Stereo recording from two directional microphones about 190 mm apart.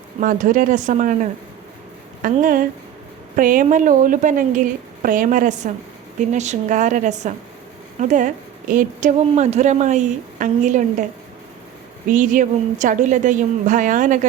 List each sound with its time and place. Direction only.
0.2 s a woman's voice: 45° right (ahead or behind)
12.0 s a woman's voice: 45° right (ahead or behind)